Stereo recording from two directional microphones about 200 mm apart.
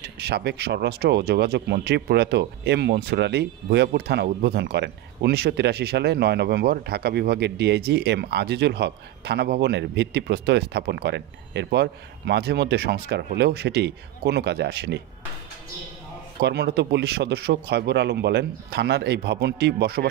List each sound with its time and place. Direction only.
0.2 s speech: 55° right (ahead or behind)
16.3 s speech: 55° right (ahead or behind)